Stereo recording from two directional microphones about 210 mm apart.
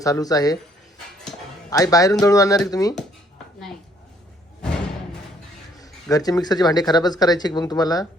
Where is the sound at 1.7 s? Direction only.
15° left (ahead or behind).